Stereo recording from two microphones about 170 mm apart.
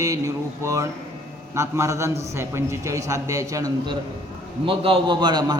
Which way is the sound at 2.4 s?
15° right (ahead or behind).